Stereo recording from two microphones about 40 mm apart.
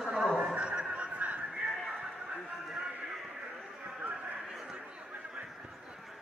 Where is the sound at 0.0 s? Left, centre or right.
Centre.